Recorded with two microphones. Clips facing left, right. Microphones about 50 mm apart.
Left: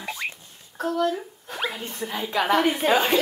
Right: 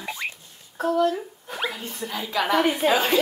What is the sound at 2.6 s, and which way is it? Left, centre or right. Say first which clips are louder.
Speech: even; centre.